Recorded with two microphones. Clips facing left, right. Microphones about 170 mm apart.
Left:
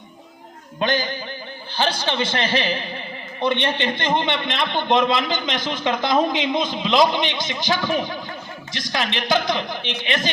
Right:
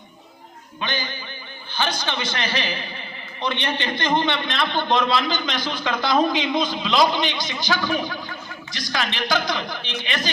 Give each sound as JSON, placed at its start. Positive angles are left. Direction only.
{"t": 0.8, "sound": "a man's voice", "side_deg": 40}
{"t": 1.7, "sound": "a man's voice", "side_deg": 30}